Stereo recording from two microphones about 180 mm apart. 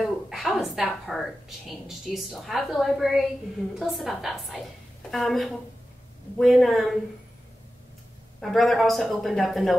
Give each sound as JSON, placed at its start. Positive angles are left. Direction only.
{"t": 0.0, "sound": "a woman's voice", "side_deg": 0}
{"t": 8.4, "sound": "a woman's voice", "side_deg": 0}